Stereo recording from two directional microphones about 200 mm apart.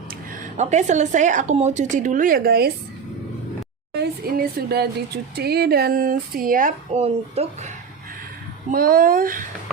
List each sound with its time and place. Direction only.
0.1 s speech: 35° right (ahead or behind); by 2.7 s 50° right (ahead or behind)
3.9 s speech: 50° right (ahead or behind); by 7.7 s 30° right (ahead or behind)
8.7 s speech: 45° right (ahead or behind)